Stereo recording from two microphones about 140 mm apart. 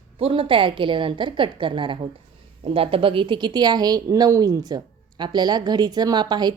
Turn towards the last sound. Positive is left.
turn(degrees=-30)  # may be behind; listen again after turning